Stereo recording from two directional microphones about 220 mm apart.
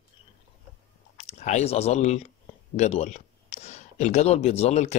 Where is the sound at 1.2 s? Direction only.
30° left (ahead or behind).